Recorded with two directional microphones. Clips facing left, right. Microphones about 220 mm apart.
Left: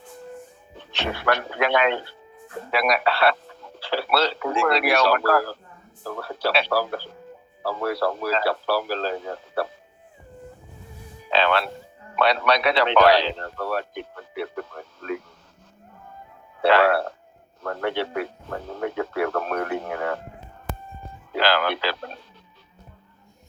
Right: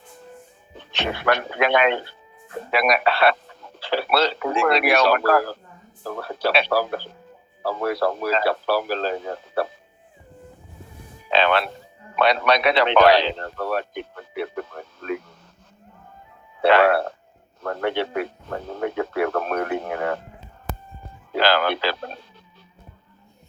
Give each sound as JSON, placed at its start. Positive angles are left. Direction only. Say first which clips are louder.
{"t": 0.9, "sound": "speech", "louder": "right 2 dB", "side_deg": -20}
{"t": 11.3, "sound": "a sound", "louder": "right 2 dB", "side_deg": -20}
{"t": 12.1, "sound": "speech", "louder": "right 2 dB", "side_deg": -20}
{"t": 16.6, "sound": "speech", "louder": "right 2 dB", "side_deg": -20}
{"t": 20.7, "sound": "a sound", "louder": "right 1 dB", "side_deg": -40}
{"t": 21.3, "sound": "speech", "louder": "right 2 dB", "side_deg": -30}